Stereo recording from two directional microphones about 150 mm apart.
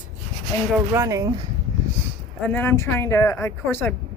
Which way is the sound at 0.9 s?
20° right (ahead or behind).